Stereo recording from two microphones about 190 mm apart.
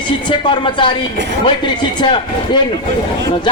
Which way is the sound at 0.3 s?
25° left (ahead or behind).